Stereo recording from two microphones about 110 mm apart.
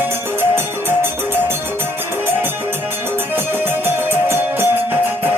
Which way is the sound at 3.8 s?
20° right (ahead or behind).